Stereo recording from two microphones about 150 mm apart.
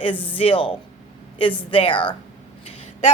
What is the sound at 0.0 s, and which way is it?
A man's voice, 35° left (ahead or behind).